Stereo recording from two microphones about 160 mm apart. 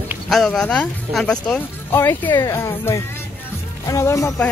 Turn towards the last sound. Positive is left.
turn(degrees=20)  # may be behind; listen again after turning